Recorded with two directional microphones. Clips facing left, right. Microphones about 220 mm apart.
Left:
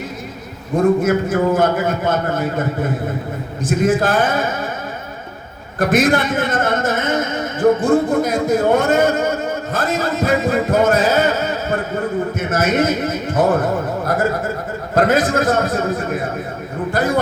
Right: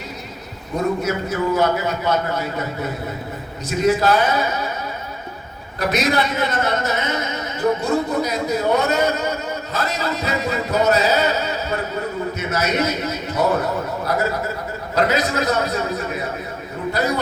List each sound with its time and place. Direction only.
0.8 s a man's voice: 50° left (ahead or behind)
5.8 s a man's voice: 50° left (ahead or behind)